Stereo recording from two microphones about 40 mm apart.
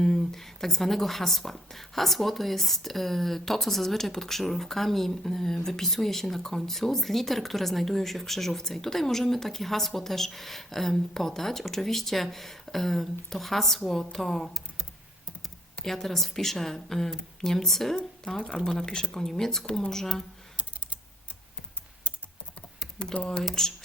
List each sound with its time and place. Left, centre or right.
0.0 s a woman's voice: centre
19.1 s speech: centre
22.0 s typing: right
23.1 s speech: left
23.4 s speech: centre